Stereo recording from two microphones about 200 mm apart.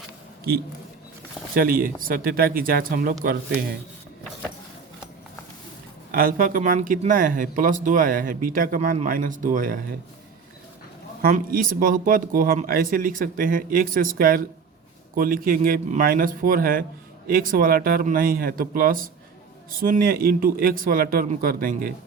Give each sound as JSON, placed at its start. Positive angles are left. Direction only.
{"t": 1.5, "sound": "speech", "side_deg": -45}
{"t": 6.1, "sound": "speech", "side_deg": -45}
{"t": 11.2, "sound": "speech", "side_deg": -45}